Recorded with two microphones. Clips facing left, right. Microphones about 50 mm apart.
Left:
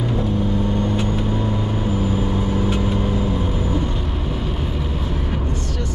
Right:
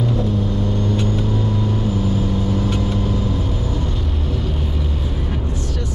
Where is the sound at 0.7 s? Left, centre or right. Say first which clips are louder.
Even; centre.